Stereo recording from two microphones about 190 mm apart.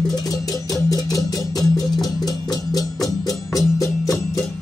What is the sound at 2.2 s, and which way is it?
Music, 20° left (ahead or behind).